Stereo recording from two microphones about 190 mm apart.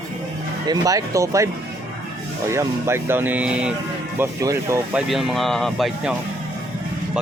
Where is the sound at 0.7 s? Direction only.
15° right (ahead or behind).